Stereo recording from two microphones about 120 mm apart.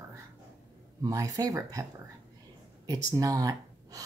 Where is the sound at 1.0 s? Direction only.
30° right (ahead or behind).